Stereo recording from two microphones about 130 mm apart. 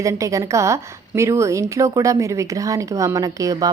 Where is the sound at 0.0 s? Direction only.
25° right (ahead or behind).